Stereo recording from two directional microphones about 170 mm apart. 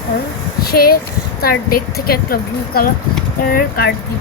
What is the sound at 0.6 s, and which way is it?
Speech, 65° left (ahead or behind).